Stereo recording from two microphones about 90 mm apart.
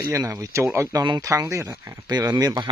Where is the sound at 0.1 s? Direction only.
35° right (ahead or behind).